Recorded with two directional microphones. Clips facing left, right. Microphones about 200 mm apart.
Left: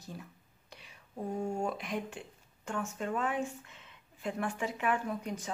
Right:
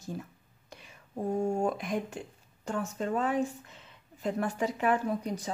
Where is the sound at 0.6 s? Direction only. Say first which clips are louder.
Right 4 dB; 45° right (ahead or behind).